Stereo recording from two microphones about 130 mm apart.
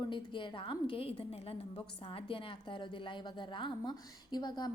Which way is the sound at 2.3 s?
40° left (ahead or behind).